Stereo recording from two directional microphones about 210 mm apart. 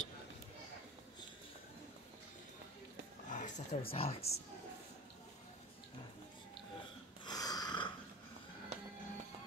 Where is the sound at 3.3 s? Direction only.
35° left (ahead or behind).